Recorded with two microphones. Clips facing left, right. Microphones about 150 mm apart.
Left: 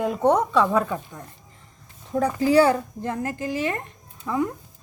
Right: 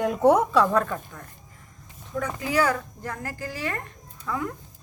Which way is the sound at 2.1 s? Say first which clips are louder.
Left 8 dB; 30° left (ahead or behind).